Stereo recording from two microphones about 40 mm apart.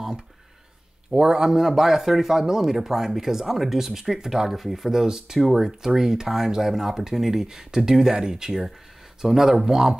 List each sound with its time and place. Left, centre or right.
1.1 s speech: centre
5.0 s speech: centre